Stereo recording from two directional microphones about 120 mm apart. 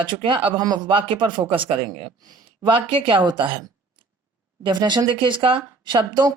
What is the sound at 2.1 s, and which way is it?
Speech, 35° right (ahead or behind).